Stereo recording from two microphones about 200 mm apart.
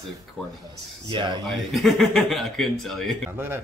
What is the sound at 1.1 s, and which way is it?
Speech, 25° right (ahead or behind).